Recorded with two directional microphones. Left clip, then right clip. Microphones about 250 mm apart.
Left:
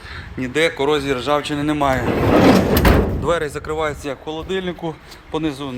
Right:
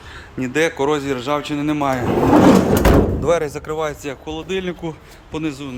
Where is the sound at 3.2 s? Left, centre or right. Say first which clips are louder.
Right 2 dB; centre.